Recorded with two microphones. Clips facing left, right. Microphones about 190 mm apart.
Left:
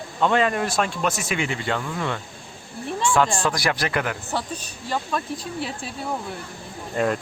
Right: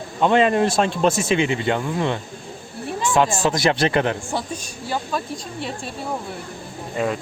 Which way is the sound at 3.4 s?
25° right (ahead or behind).